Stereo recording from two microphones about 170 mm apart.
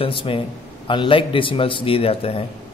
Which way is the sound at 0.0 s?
30° left (ahead or behind).